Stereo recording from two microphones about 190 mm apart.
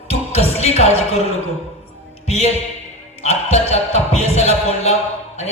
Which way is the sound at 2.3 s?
35° left (ahead or behind).